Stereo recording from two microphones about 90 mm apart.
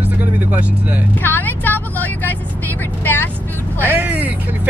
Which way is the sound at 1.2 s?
20° left (ahead or behind).